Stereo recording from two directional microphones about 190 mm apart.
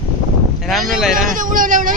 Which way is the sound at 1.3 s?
45° right (ahead or behind).